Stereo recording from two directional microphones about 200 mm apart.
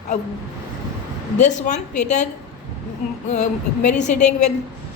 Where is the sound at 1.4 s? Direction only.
35° left (ahead or behind).